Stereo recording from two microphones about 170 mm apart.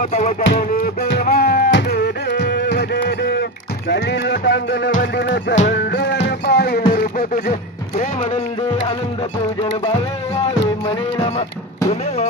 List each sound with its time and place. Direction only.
0.0 s music: 45° left (ahead or behind)
0.4 s music: 75° left (ahead or behind)
6.9 s a sound: 60° left (ahead or behind)
10.8 s music: 30° left (ahead or behind)